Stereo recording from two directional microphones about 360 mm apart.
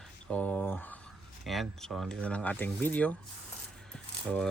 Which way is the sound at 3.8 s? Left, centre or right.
Centre.